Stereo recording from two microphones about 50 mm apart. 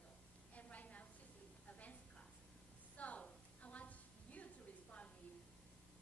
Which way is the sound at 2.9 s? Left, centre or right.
Left.